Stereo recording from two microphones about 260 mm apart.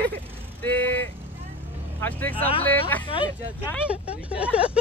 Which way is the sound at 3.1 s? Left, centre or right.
Centre.